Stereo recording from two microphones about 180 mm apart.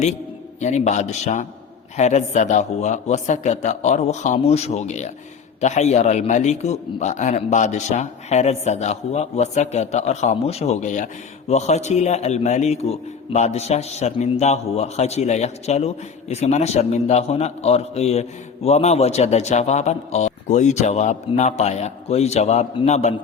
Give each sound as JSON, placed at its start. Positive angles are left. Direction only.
{"t": 0.6, "sound": "a man's voice", "side_deg": 40}